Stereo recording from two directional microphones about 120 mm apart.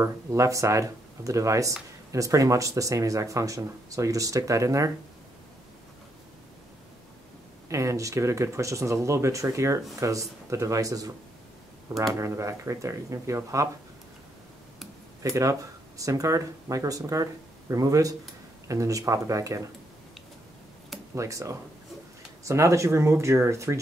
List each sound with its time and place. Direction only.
0.0 s speech: 25° right (ahead or behind)
7.7 s speech: 25° right (ahead or behind)
12.1 s speech: 25° right (ahead or behind)
15.2 s speech: 25° right (ahead or behind)
21.1 s speech: 25° right (ahead or behind)